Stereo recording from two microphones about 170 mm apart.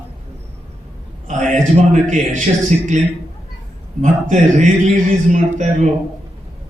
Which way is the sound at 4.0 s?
45° right (ahead or behind).